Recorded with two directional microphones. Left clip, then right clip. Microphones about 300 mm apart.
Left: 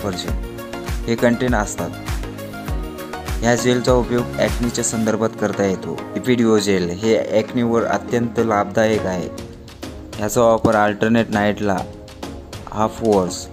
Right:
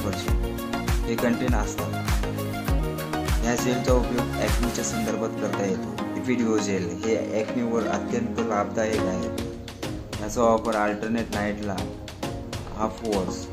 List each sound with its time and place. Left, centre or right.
1.0 s speech: left
3.4 s speech: left
10.2 s speech: left
12.7 s speech: left